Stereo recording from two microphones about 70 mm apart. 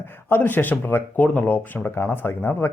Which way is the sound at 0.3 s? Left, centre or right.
Left.